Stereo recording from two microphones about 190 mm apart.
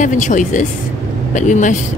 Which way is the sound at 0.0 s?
40° left (ahead or behind).